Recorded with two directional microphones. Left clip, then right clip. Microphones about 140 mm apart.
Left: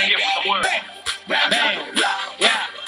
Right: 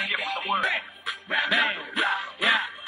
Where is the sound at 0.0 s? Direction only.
35° left (ahead or behind).